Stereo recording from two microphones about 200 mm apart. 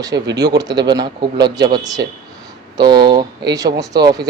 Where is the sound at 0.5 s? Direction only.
20° right (ahead or behind).